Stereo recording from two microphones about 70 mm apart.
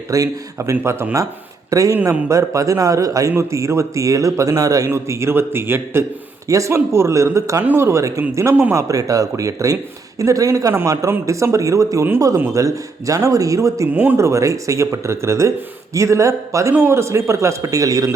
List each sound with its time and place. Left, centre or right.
0.1 s speech: right
0.8 s a man's voice: right
1.7 s speech: right
4.9 s a man's voice: right
6.5 s a man's voice: right
8.7 s speech: right
13.9 s speech: right
14.2 s speech: right